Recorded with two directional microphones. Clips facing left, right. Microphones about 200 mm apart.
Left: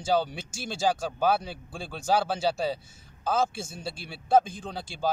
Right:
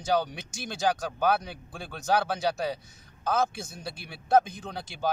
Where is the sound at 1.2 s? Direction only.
5° left (ahead or behind).